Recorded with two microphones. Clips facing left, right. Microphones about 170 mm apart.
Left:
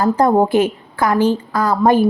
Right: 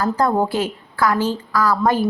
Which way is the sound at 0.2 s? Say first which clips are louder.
Left 6 dB; 20° left (ahead or behind).